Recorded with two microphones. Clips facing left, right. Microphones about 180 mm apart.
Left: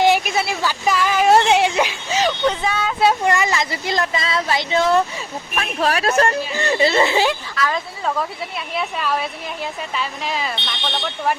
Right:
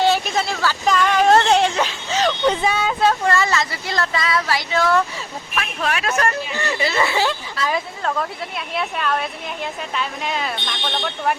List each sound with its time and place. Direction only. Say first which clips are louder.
0.0 s a sound: left 2 dB; 10° left (ahead or behind)
2.6 s a sound: right 2 dB; 5° right (ahead or behind)
3.0 s speech: left 2 dB; 15° left (ahead or behind)
5.5 s speech: left 3 dB; 35° left (ahead or behind); by 7.3 s 20° left (ahead or behind)
7.6 s speech: left 1 dB; 30° right (ahead or behind)
8.0 s speech: left 1 dB; centre (ahead or behind)